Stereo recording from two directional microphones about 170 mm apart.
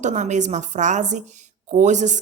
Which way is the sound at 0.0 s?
45° right (ahead or behind).